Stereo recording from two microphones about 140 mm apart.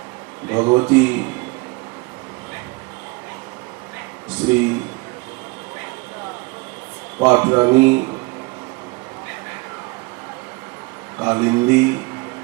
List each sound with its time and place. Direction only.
0.5 s speech: 25° right (ahead or behind)
4.4 s a sound: 15° right (ahead or behind)
7.3 s speech: 15° right (ahead or behind)
11.2 s speech: 20° right (ahead or behind)